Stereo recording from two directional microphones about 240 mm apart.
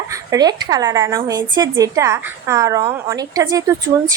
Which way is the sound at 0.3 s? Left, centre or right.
Centre.